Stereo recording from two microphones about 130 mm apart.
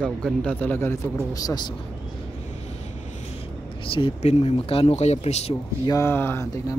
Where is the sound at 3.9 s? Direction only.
50° left (ahead or behind).